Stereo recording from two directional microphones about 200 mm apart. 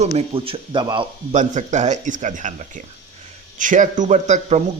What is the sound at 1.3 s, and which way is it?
A man's voice, 35° right (ahead or behind).